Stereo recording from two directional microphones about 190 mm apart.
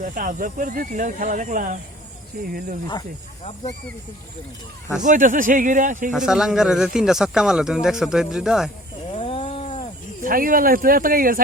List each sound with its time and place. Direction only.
0.0 s speech: 45° right (ahead or behind)
5.0 s speech: 45° right (ahead or behind)
6.1 s speech: 5° right (ahead or behind)
9.1 s snoring: 30° left (ahead or behind)
10.2 s speech: 50° right (ahead or behind)